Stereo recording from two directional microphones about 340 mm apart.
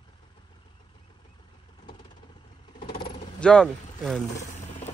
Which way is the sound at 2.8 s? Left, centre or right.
Centre.